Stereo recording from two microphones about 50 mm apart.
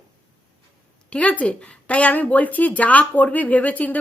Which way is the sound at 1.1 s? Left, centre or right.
Left.